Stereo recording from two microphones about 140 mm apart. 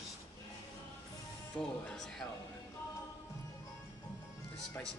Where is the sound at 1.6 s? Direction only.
5° left (ahead or behind).